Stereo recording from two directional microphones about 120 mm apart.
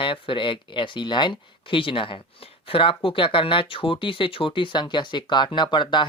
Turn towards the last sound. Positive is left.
turn(degrees=40)  # may be behind; listen again after turning